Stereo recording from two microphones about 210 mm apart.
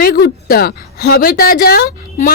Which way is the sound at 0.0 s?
45° left (ahead or behind).